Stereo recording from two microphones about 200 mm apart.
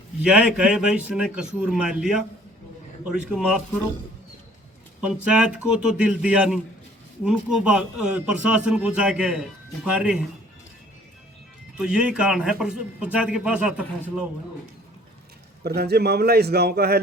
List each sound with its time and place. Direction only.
0.2 s a man's voice: 5° right (ahead or behind)
4.9 s a man's voice: 5° right (ahead or behind)
11.8 s a man's voice: 5° right (ahead or behind)
15.6 s a man's voice: 55° right (ahead or behind)